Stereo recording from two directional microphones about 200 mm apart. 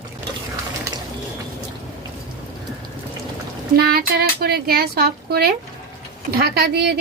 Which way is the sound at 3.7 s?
50° right (ahead or behind).